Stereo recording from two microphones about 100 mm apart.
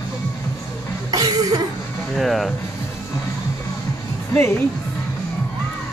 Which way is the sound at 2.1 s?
Centre (ahead or behind).